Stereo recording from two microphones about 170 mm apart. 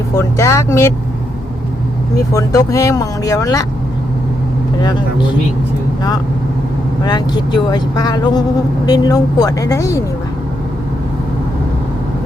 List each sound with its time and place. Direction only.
0.2 s speech: 15° left (ahead or behind)
2.1 s speech: 20° left (ahead or behind)
7.0 s speech: 25° left (ahead or behind)